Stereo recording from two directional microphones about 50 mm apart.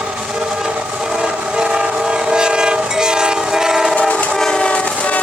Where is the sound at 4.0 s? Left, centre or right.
Left.